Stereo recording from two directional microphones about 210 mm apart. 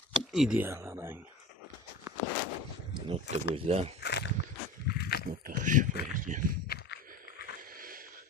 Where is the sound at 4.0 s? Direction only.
55° left (ahead or behind).